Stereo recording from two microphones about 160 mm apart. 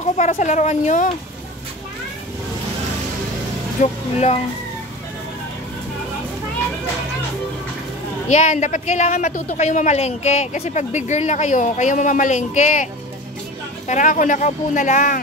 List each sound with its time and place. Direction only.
0.0 s speech: 50° left (ahead or behind)
3.8 s speech: 40° left (ahead or behind)
8.3 s a woman's voice: 50° left (ahead or behind)